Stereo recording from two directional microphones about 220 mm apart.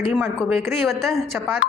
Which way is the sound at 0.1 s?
5° right (ahead or behind).